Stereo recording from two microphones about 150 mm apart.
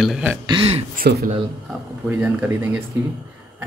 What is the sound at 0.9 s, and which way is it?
Speech, 75° right (ahead or behind).